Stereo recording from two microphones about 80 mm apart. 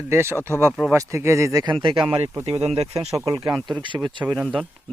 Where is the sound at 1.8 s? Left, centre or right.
Right.